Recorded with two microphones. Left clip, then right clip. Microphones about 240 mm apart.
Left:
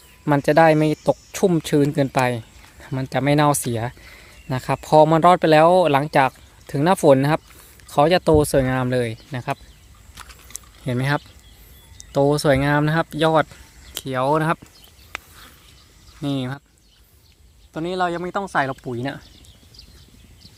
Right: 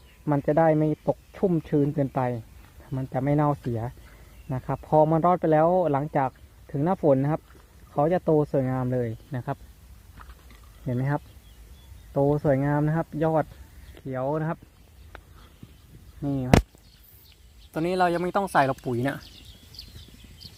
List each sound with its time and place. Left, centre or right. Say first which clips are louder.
0.3 s speech: left 7 dB; left
10.5 s a sound: left 6 dB; left
12.1 s speech: left 6 dB; left
16.2 s speech: left 5 dB; left
17.7 s speech: left 1 dB; centre